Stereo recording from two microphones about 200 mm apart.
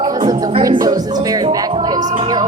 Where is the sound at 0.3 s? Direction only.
20° right (ahead or behind).